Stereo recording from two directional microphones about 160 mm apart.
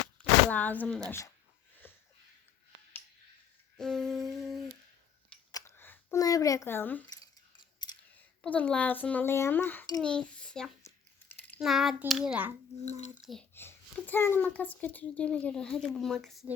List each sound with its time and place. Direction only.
0.2 s speech: 10° left (ahead or behind)
1.8 s sniff: 10° left (ahead or behind)
3.8 s humming: 5° left (ahead or behind)
5.5 s a sound: 20° left (ahead or behind)
6.7 s speech: 10° left (ahead or behind)
7.8 s scissors: 25° left (ahead or behind)
8.4 s a child's voice: 10° left (ahead or behind); by 12.5 s 10° right (ahead or behind)
13.5 s speech: 15° left (ahead or behind)